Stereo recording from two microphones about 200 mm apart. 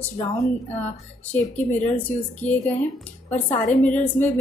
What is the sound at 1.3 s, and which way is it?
A woman's voice, 5° left (ahead or behind).